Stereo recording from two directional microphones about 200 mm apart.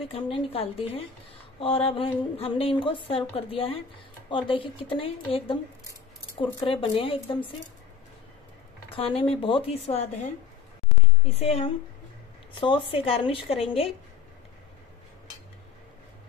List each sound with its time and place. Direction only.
0.0 s a woman's voice: 25° left (ahead or behind)
8.9 s a woman's voice: 30° left (ahead or behind)
11.3 s a woman's voice: 30° left (ahead or behind)